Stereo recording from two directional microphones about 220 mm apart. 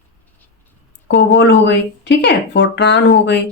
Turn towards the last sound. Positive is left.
turn(degrees=50)  # may be behind; listen again after turning